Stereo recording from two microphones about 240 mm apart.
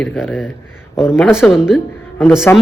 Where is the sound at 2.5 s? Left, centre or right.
Centre.